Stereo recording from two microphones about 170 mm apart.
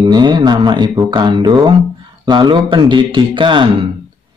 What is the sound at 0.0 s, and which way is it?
A man's voice, 25° right (ahead or behind).